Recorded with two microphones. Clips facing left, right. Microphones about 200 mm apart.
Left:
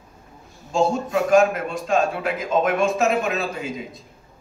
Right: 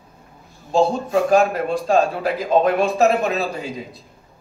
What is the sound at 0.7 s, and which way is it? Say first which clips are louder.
Speech: right 3 dB; 35° right (ahead or behind).